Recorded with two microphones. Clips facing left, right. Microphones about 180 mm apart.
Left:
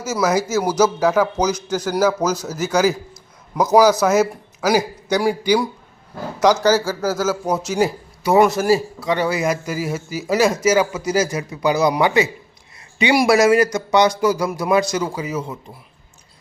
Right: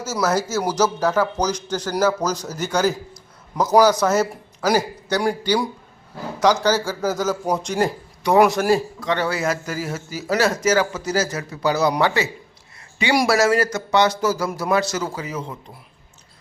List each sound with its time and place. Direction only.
0.0 s a man's voice: 10° left (ahead or behind)